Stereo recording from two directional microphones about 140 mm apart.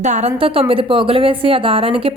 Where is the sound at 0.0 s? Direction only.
55° right (ahead or behind).